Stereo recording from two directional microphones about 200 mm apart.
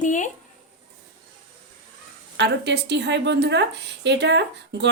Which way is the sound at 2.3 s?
60° right (ahead or behind).